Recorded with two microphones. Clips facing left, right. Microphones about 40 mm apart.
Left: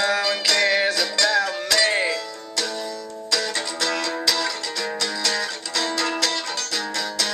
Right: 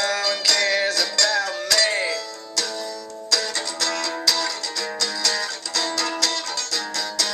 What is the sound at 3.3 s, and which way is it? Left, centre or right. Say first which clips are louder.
Music: left 1 dB; left.